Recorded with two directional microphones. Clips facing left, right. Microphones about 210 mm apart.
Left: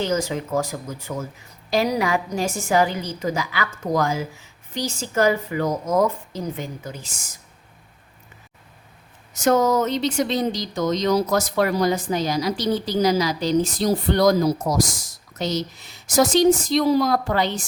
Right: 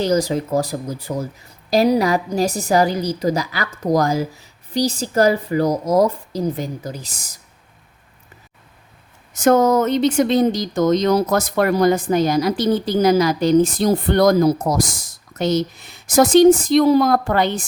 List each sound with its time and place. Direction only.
0.0 s a woman's voice: 35° right (ahead or behind)
9.3 s speech: 55° right (ahead or behind)